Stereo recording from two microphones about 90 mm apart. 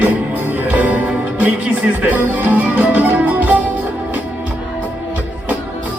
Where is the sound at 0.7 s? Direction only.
15° right (ahead or behind).